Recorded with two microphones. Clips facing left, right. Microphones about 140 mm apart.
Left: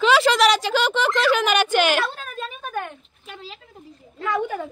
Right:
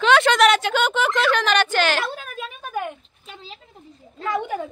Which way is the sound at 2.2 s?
5° right (ahead or behind).